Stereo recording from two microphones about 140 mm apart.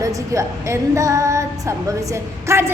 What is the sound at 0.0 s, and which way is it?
Speech, 25° right (ahead or behind).